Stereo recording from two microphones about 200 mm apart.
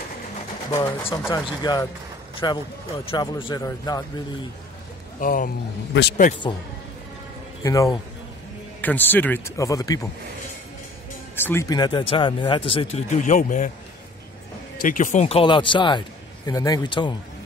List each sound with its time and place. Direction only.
0.7 s speech: 15° left (ahead or behind)
5.2 s a man's voice: 45° left (ahead or behind)
7.6 s speech: 15° left (ahead or behind)
11.3 s speech: 10° left (ahead or behind); by 13.7 s 40° left (ahead or behind)
14.8 s speech: 40° left (ahead or behind); by 17.1 s 20° left (ahead or behind)